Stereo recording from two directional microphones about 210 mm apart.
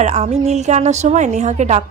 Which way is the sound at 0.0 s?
30° right (ahead or behind).